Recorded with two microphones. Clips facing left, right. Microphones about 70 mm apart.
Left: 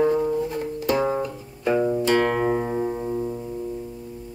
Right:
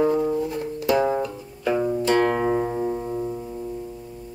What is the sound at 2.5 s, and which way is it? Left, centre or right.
Music, centre.